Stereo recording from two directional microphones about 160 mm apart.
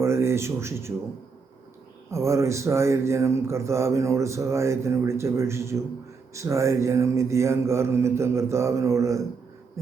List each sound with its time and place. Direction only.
0.0 s speech: 15° right (ahead or behind)
2.0 s speech: 20° right (ahead or behind)